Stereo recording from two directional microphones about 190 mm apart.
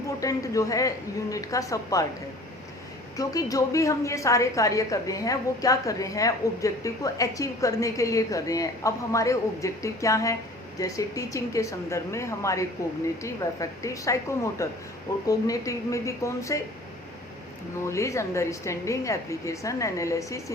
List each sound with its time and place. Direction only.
0.2 s a woman's voice: 20° left (ahead or behind)
3.2 s a woman's voice: 20° left (ahead or behind)
17.8 s a woman's voice: 15° left (ahead or behind)